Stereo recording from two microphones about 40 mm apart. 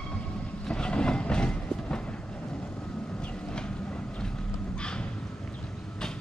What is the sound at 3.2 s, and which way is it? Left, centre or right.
Train, left.